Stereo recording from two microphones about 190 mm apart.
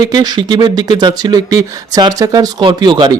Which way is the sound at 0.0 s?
20° right (ahead or behind).